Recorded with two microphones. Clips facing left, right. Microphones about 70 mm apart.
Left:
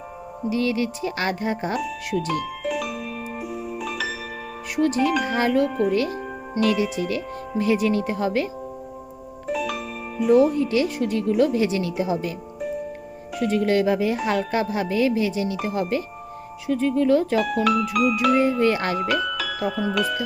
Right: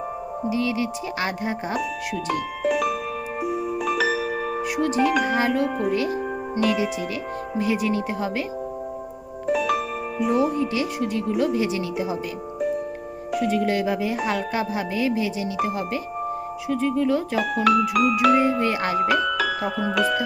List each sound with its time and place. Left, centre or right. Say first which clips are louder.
0.5 s speech: left 2 dB; centre
2.6 s music: right 8 dB; right
4.8 s speech: left 1 dB; centre
9.6 s music: right 5 dB; right
10.4 s speech: left 3 dB; centre
13.4 s speech: left 3 dB; centre
19.5 s speech: even; right
20.0 s music: right 5 dB; right